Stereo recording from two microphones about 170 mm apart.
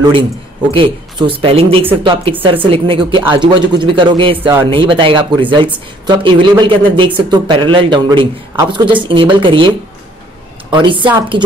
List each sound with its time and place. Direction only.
0.7 s a woman's voice: 30° right (ahead or behind)